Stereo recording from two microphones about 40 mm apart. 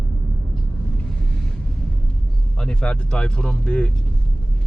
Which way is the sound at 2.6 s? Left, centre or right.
Left.